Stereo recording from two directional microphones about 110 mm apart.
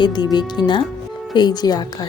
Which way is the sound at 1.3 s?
40° left (ahead or behind).